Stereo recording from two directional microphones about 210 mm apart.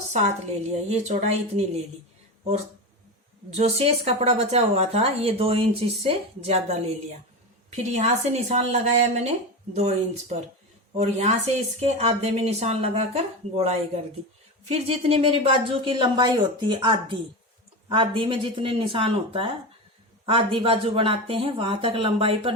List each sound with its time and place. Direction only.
0.9 s speech: 30° right (ahead or behind)
3.5 s speech: 30° right (ahead or behind)